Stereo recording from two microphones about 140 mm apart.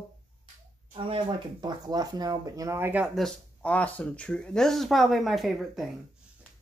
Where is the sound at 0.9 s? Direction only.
40° right (ahead or behind); by 3.1 s 15° right (ahead or behind).